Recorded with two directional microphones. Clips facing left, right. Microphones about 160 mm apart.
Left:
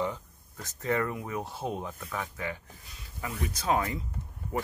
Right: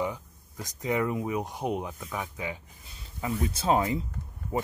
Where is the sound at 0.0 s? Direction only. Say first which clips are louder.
Right 1 dB; 15° right (ahead or behind).